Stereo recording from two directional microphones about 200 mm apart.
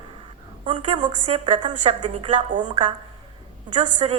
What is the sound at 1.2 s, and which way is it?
Speech, 30° right (ahead or behind).